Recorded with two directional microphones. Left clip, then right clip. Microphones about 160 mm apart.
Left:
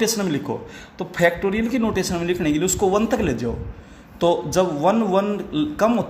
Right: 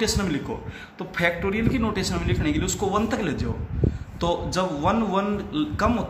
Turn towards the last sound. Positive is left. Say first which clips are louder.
# left 4 dB
turn(degrees=50)  # may be behind; listen again after turning